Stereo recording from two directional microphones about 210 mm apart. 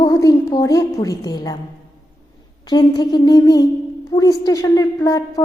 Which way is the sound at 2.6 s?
20° left (ahead or behind).